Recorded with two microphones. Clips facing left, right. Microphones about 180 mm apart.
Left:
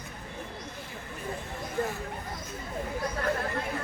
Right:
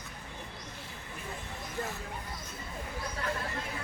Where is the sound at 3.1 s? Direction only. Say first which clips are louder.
Left 5 dB; 50° left (ahead or behind).